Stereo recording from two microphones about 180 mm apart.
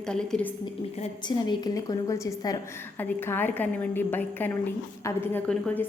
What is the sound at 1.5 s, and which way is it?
A woman's voice, 20° left (ahead or behind).